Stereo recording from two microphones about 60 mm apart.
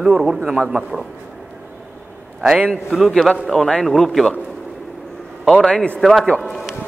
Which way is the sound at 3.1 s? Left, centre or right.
Centre.